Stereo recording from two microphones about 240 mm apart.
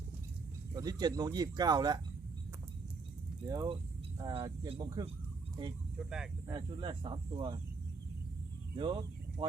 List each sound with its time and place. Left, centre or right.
0.7 s speech: centre
3.5 s speech: centre
6.0 s speech: centre
6.5 s speech: right
8.7 s speech: centre